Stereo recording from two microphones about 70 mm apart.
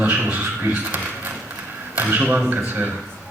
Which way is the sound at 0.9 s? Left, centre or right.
Right.